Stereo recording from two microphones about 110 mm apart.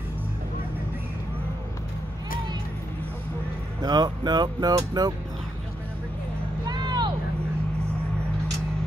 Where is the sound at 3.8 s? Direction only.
40° right (ahead or behind).